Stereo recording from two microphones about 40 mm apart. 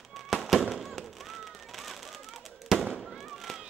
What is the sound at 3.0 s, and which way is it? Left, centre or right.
Fireworks, centre.